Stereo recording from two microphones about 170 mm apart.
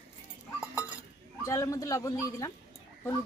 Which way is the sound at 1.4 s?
20° left (ahead or behind).